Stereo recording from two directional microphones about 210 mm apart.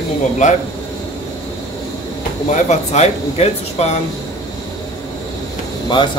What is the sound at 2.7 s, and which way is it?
Speech, 30° left (ahead or behind).